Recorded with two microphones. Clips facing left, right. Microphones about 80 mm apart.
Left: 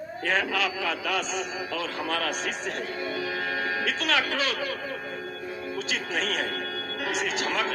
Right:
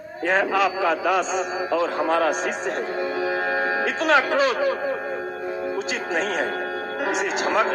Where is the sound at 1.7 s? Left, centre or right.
Right.